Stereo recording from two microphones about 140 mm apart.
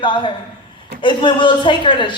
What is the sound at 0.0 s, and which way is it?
A woman's voice, 35° left (ahead or behind).